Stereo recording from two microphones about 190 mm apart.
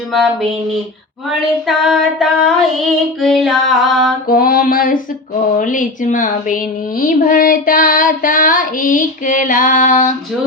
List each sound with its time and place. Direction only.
1.6 s child singing: centre (ahead or behind)
4.3 s child singing: 50° left (ahead or behind)